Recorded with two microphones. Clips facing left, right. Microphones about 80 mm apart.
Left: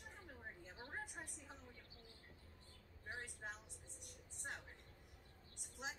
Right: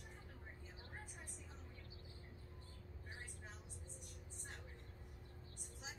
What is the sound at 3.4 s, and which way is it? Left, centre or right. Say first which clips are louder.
Vehicle: left 7 dB; left.